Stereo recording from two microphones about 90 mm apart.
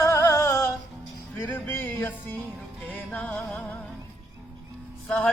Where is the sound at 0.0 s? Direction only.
30° left (ahead or behind).